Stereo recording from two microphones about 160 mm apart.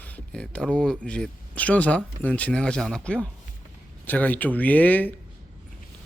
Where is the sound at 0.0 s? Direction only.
10° left (ahead or behind).